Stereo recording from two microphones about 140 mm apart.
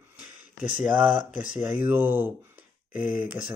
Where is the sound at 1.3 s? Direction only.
65° left (ahead or behind).